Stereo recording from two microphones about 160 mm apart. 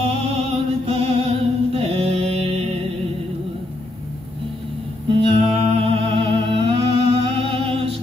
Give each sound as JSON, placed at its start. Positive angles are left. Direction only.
{"t": 0.3, "sound": "music", "side_deg": -35}
{"t": 5.3, "sound": "humming", "side_deg": -40}